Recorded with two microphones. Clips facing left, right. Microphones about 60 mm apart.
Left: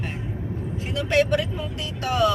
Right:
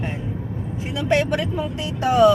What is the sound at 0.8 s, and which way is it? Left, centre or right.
Speech, centre.